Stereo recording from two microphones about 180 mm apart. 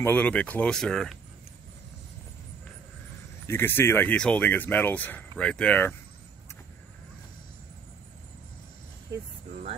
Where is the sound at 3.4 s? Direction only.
10° left (ahead or behind).